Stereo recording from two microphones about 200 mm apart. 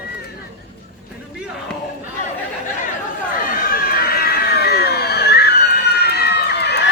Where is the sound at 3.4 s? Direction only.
45° left (ahead or behind).